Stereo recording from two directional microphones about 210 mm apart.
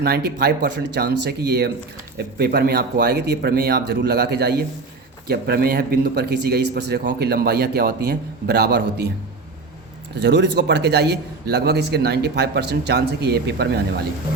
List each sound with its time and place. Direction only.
0.0 s a man's voice: 50° right (ahead or behind)
10.2 s a man's voice: 55° right (ahead or behind)